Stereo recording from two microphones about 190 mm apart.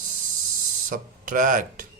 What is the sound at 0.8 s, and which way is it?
Speech, 45° right (ahead or behind).